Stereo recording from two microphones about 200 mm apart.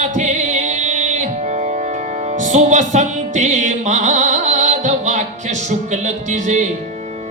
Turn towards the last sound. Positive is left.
turn(degrees=-35)  # may be behind; listen again after turning